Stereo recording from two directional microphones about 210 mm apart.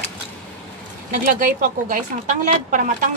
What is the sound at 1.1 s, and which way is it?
A woman's voice, 40° right (ahead or behind).